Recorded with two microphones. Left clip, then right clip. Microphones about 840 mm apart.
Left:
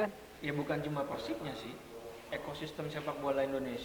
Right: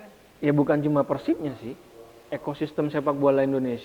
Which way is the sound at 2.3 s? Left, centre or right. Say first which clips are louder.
Right 12 dB; right.